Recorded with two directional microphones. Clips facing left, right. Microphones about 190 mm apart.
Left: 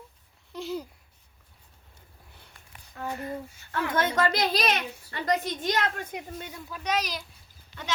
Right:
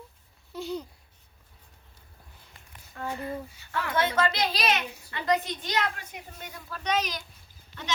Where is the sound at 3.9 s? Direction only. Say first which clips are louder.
Left 1 dB; 45° left (ahead or behind).